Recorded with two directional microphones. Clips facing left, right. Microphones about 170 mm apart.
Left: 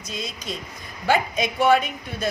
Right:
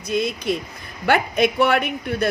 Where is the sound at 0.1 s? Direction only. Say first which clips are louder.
Right 11 dB; 60° right (ahead or behind).